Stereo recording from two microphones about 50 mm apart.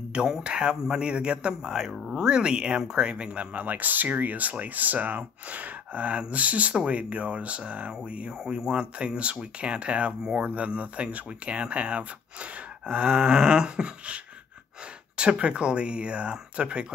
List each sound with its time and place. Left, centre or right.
0.1 s speech: centre
3.5 s speech: right